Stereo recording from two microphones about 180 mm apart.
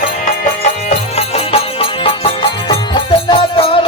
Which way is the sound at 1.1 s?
35° left (ahead or behind).